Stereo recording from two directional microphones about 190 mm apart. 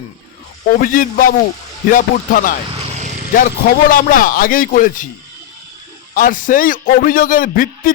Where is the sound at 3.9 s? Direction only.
45° left (ahead or behind).